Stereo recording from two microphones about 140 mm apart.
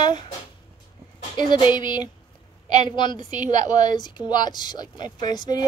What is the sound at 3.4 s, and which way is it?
Speech, 60° right (ahead or behind).